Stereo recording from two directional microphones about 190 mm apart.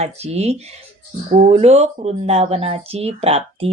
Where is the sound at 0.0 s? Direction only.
35° right (ahead or behind).